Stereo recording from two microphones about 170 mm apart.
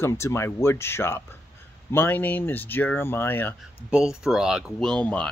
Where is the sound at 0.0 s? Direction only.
15° left (ahead or behind).